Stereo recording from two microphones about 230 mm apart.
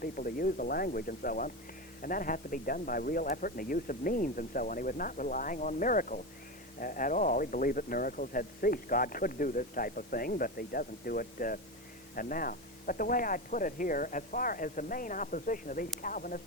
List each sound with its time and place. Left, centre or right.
0.0 s speech: left